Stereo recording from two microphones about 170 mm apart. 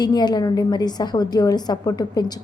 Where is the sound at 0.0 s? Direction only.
25° left (ahead or behind).